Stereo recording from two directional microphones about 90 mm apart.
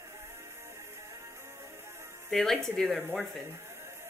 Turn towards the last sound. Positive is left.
turn(degrees=0)  # may be behind; listen again after turning